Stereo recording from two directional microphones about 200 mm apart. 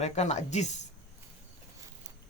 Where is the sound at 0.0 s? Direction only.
35° left (ahead or behind).